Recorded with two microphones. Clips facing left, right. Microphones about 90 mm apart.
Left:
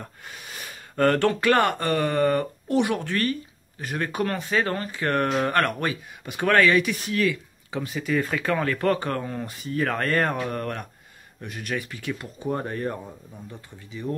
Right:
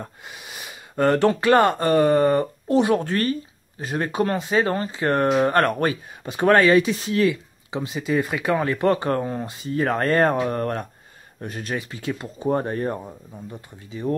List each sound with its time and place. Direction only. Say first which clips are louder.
0.3 s speech: right 1 dB; 15° right (ahead or behind)